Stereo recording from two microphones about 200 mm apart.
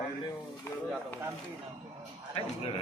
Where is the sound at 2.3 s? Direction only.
30° left (ahead or behind).